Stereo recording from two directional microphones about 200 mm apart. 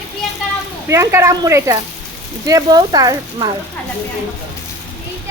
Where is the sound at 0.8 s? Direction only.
15° right (ahead or behind).